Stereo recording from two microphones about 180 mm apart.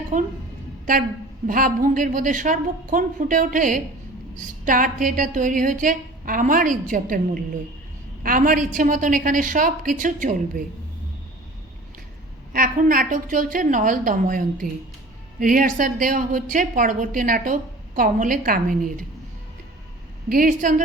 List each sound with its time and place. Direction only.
0.1 s a woman's voice: 45° right (ahead or behind)
1.5 s a woman's voice: 50° right (ahead or behind)
12.5 s a woman's voice: 50° right (ahead or behind)
20.3 s a woman's voice: 50° right (ahead or behind)